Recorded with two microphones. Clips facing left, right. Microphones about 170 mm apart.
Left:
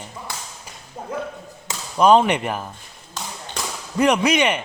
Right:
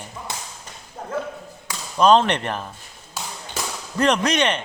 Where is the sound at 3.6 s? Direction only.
Centre (ahead or behind).